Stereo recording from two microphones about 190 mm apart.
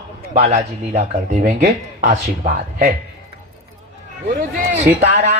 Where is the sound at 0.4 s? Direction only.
40° right (ahead or behind).